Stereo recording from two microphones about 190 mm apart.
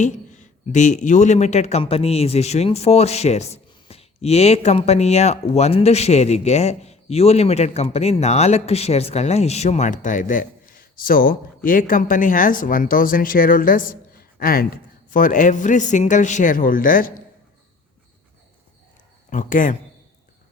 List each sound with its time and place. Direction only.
0.0 s a man's voice: 40° left (ahead or behind)
19.3 s speech: 45° left (ahead or behind)